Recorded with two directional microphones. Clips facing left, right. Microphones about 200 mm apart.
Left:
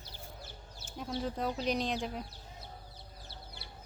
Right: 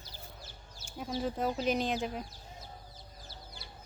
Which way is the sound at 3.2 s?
60° left (ahead or behind).